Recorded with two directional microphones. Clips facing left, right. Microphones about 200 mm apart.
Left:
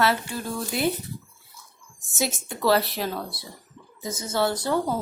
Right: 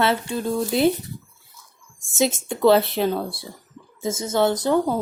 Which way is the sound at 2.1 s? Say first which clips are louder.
Right 7 dB; 20° right (ahead or behind).